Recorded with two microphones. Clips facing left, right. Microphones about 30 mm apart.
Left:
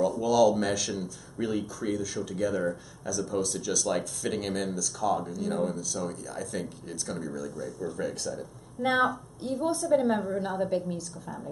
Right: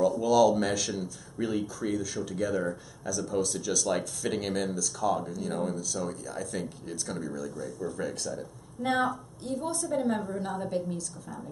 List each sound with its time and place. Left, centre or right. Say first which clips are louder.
0.0 s a woman's voice: even; centre